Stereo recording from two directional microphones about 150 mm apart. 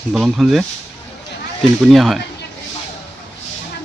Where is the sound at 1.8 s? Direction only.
Centre (ahead or behind).